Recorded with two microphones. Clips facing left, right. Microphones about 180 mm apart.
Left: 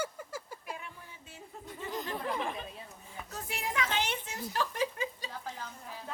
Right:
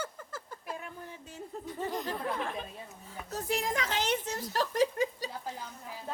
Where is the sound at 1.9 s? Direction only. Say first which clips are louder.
Left 2 dB; centre (ahead or behind).